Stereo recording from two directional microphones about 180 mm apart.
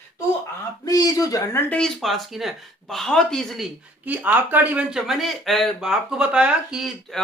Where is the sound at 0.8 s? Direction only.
20° left (ahead or behind).